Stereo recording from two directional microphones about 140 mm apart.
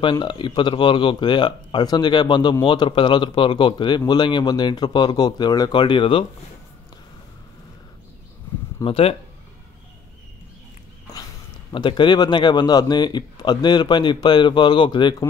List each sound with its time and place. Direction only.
0.0 s speech: 35° left (ahead or behind)
8.8 s speech: 40° left (ahead or behind)
11.7 s speech: 35° left (ahead or behind)